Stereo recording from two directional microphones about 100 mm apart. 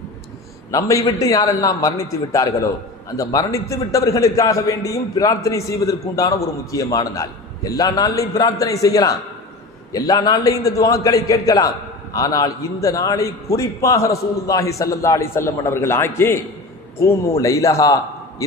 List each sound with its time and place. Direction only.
0.7 s a man's voice: 30° left (ahead or behind)